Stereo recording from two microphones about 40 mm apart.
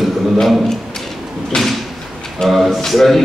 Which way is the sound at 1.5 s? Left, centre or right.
Centre.